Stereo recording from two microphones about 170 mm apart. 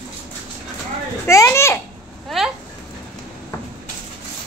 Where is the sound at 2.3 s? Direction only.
Centre (ahead or behind).